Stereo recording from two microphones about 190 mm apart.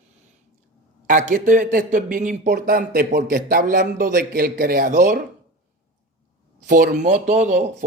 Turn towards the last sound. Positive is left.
turn(degrees=-40)  # may be behind; listen again after turning